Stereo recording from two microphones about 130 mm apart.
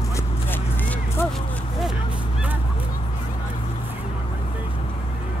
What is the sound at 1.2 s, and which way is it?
Speech, 20° left (ahead or behind).